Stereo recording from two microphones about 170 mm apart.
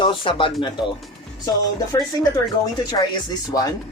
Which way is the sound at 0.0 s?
30° left (ahead or behind).